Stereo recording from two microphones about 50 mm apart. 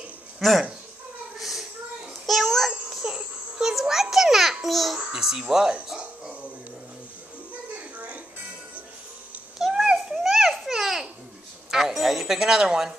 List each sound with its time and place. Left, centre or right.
0.4 s speech: centre
1.4 s a sound: centre
2.9 s music: centre
3.2 s a sound: centre
5.1 s speech: centre
7.5 s music: right
9.6 s babbling: centre
11.7 s speech: centre